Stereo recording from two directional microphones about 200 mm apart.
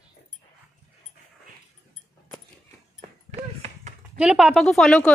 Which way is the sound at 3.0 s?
35° right (ahead or behind).